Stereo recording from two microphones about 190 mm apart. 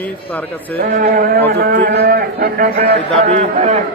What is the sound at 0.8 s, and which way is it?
A man's voice, 50° right (ahead or behind).